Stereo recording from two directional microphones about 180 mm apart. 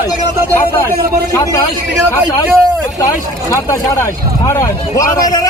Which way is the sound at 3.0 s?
20° left (ahead or behind).